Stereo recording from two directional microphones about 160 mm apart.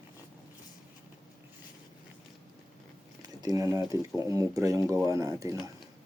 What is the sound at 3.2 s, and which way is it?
Speech, 25° right (ahead or behind).